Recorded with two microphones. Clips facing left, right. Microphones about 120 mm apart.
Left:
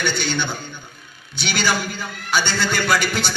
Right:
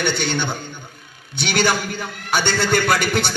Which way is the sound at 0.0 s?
50° right (ahead or behind).